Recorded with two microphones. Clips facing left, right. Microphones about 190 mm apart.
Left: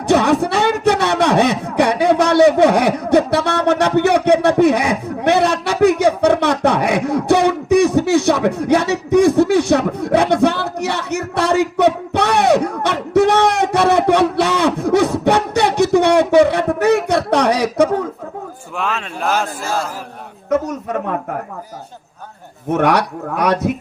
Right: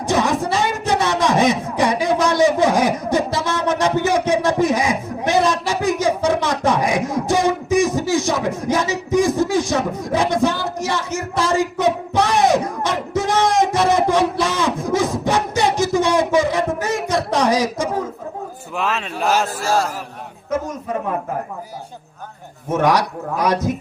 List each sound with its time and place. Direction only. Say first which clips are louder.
0.1 s a sound: left 5 dB; 65° left (ahead or behind)
18.8 s a man's voice: even; centre (ahead or behind)
22.7 s speech: left 2 dB; 65° left (ahead or behind)